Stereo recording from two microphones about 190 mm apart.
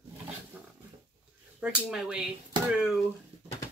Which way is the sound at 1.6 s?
5° right (ahead or behind).